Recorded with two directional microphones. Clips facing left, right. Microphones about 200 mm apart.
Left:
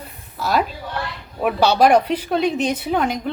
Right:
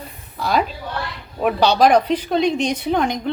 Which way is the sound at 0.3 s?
5° left (ahead or behind).